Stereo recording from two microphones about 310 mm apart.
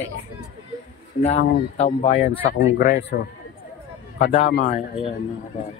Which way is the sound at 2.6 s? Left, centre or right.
Left.